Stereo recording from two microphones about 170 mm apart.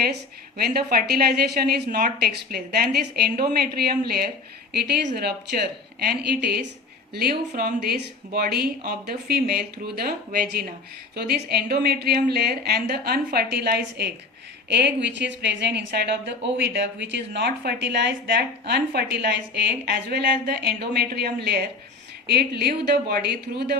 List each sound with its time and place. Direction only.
0.0 s a woman's voice: 65° right (ahead or behind)
7.1 s a woman's voice: 65° right (ahead or behind)